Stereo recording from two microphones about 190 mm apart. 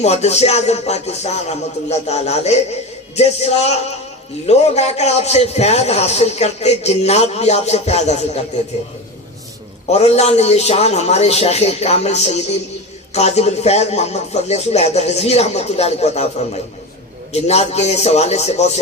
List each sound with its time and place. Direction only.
0.0 s a man's voice: 35° left (ahead or behind)
9.9 s a man's voice: 35° left (ahead or behind)